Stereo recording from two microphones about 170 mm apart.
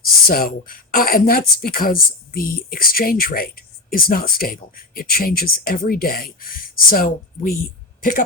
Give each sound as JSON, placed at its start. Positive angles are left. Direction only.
{"t": 0.0, "sound": "speech", "side_deg": 60}